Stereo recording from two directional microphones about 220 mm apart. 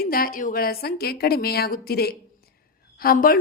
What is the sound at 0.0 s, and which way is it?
A woman's voice, 40° left (ahead or behind).